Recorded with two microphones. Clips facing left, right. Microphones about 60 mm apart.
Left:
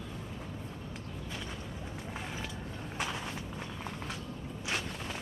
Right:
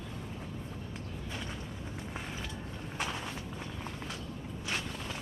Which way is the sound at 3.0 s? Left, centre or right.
Centre.